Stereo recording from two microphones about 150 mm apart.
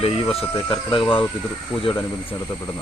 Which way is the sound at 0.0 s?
40° left (ahead or behind).